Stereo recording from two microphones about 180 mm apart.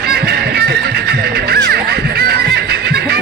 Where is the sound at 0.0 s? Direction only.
60° right (ahead or behind).